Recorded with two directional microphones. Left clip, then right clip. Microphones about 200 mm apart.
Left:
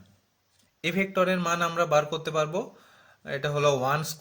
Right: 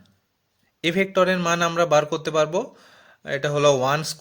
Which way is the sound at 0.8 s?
35° right (ahead or behind).